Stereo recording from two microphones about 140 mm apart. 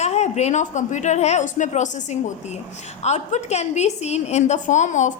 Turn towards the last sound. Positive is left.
turn(degrees=60)  # may be behind; listen again after turning